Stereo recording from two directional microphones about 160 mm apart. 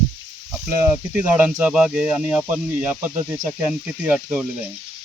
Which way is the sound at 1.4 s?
10° right (ahead or behind).